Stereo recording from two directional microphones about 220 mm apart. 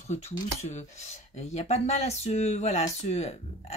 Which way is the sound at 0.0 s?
30° left (ahead or behind).